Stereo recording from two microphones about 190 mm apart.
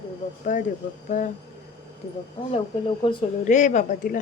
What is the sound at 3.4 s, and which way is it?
Speech, 40° left (ahead or behind).